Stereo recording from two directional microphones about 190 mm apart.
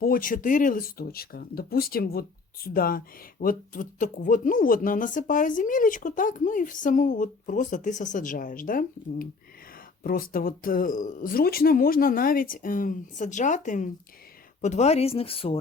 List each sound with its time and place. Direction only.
0.0 s speech: 50° left (ahead or behind); by 15.5 s 30° left (ahead or behind)